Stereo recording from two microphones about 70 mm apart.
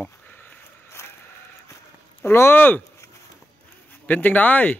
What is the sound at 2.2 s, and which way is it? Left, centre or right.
Speech, left.